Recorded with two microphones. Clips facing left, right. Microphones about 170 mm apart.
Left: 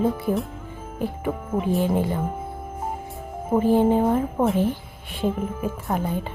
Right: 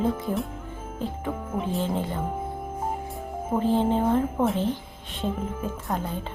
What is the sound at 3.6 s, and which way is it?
Speech, 10° left (ahead or behind).